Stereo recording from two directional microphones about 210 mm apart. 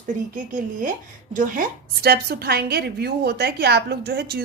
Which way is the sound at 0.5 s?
40° right (ahead or behind).